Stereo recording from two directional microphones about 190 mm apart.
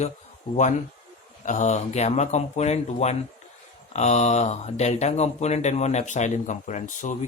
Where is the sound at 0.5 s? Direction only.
30° left (ahead or behind).